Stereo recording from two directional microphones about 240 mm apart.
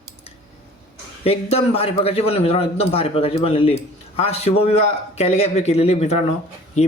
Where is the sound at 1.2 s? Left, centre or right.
Left.